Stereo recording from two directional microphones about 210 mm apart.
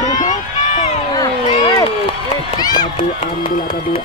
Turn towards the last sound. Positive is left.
turn(degrees=25)  # may be behind; listen again after turning